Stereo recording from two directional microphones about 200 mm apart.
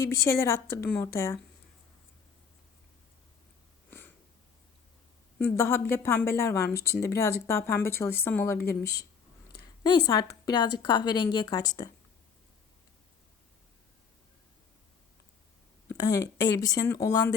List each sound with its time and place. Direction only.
0.0 s speech: 15° left (ahead or behind)
3.8 s snort: 10° left (ahead or behind)
5.4 s a woman's voice: 10° left (ahead or behind)
15.9 s speech: 20° left (ahead or behind)